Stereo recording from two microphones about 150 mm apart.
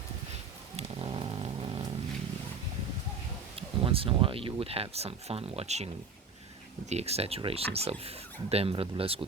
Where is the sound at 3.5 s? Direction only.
40° right (ahead or behind).